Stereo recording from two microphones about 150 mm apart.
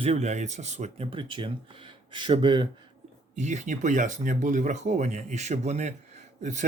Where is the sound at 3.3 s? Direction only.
50° right (ahead or behind).